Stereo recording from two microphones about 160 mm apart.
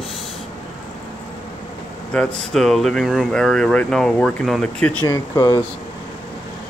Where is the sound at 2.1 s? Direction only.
5° left (ahead or behind).